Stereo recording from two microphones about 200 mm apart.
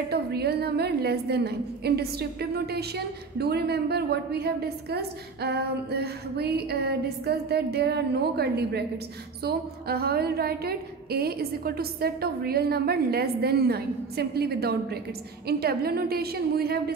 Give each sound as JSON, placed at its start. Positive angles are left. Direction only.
{"t": 0.1, "sound": "a woman's voice", "side_deg": -55}